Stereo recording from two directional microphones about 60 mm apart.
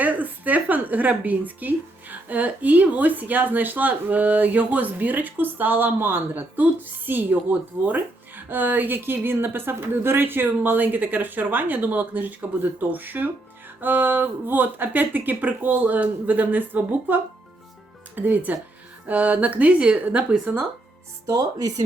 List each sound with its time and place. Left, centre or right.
0.0 s speech: right
8.4 s a woman's voice: right
21.2 s speech: right